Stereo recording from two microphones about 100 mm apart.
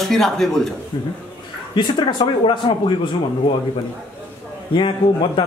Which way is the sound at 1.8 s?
55° left (ahead or behind).